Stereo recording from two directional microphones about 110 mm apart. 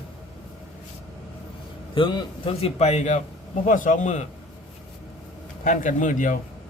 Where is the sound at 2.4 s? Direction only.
70° left (ahead or behind); by 3.2 s 85° left.